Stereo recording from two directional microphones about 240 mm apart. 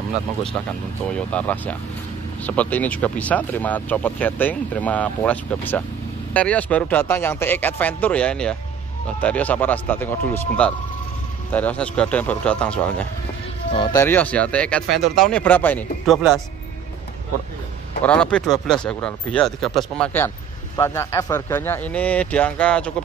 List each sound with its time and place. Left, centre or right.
1.0 s speech: centre
18.0 s speech: centre